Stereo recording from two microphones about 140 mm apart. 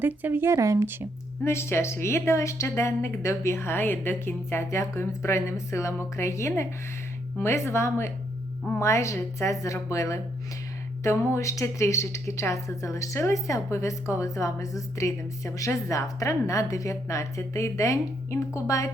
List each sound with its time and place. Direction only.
0.0 s speech: 15° right (ahead or behind)
1.5 s a woman's voice: 20° left (ahead or behind)
11.3 s a woman's voice: 20° left (ahead or behind)